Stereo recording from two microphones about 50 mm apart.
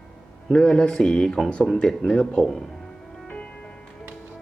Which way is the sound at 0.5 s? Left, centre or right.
Centre.